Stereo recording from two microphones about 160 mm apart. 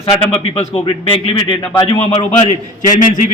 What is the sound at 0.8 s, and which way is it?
A man's voice, 30° left (ahead or behind).